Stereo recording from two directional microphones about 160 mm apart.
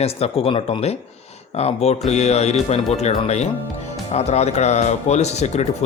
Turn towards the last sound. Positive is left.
turn(degrees=45)  # may be behind; listen again after turning